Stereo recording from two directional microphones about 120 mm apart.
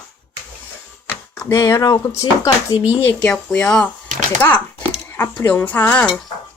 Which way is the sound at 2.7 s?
15° right (ahead or behind).